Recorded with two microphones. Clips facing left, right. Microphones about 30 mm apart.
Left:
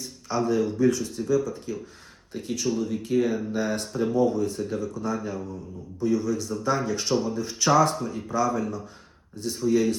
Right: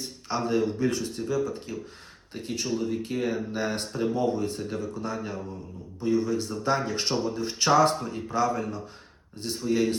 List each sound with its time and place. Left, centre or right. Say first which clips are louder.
0.0 s speech: left 3 dB; right
3.0 s speech: left 4 dB; right